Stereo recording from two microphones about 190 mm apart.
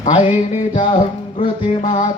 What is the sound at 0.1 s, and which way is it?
Music, 30° left (ahead or behind).